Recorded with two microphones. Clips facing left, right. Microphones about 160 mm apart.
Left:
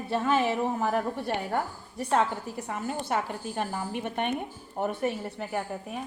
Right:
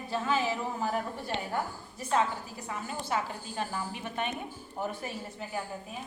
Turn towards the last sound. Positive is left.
turn(degrees=60)  # may be behind; listen again after turning